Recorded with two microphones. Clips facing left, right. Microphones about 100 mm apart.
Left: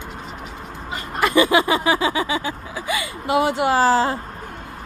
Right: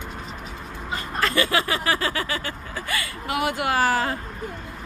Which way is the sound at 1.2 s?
15° left (ahead or behind).